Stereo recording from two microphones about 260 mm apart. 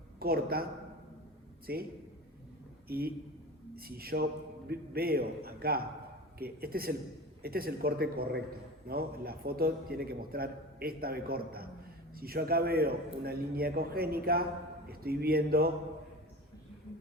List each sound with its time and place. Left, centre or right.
0.2 s a man's voice: right